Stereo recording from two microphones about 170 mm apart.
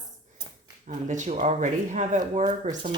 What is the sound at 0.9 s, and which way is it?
Speech, 45° right (ahead or behind).